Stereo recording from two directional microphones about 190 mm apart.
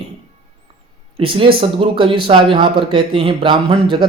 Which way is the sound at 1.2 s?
30° right (ahead or behind).